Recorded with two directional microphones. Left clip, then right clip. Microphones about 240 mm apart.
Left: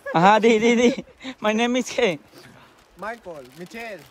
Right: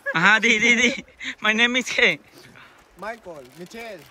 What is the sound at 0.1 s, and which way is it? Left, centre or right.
Speech, centre.